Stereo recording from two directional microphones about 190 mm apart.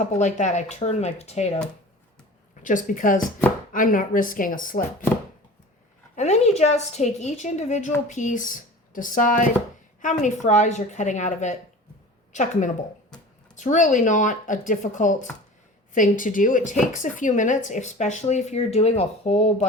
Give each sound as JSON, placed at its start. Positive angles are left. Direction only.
{"t": 0.0, "sound": "speech", "side_deg": 40}
{"t": 2.6, "sound": "speech", "side_deg": 45}
{"t": 6.1, "sound": "speech", "side_deg": 35}